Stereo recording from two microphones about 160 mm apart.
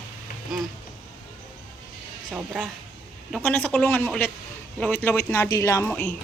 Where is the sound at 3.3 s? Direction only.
10° left (ahead or behind).